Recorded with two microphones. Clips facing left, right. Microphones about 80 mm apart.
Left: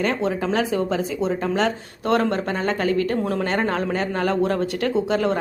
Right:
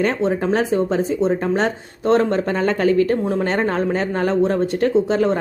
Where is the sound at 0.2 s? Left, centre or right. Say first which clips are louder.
Right 3 dB; right.